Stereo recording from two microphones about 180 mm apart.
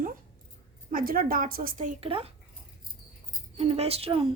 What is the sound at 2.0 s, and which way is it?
Speech, 30° right (ahead or behind).